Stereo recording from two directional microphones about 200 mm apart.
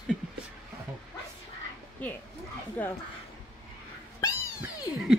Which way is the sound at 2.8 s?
10° left (ahead or behind).